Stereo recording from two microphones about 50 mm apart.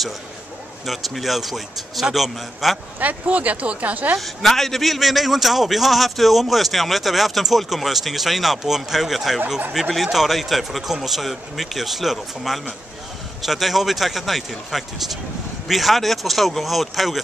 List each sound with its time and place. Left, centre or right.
0.8 s a man's voice: centre
3.0 s speech: right
4.2 s a man's voice: centre